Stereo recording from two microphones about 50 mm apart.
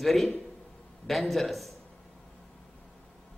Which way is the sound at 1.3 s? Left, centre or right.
Centre.